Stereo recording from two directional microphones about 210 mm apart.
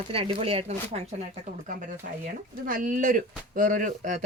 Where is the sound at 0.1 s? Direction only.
25° right (ahead or behind).